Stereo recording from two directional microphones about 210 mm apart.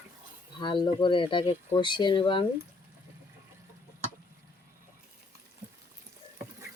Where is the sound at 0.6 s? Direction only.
20° left (ahead or behind).